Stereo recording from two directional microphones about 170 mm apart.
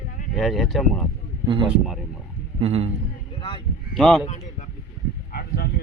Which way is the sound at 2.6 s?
40° right (ahead or behind).